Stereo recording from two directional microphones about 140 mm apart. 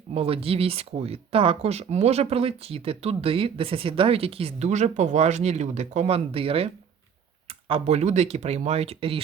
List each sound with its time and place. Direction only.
0.1 s speech: 40° right (ahead or behind)
7.7 s speech: 50° right (ahead or behind)